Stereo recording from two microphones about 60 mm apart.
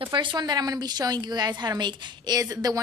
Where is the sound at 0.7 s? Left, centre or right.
Right.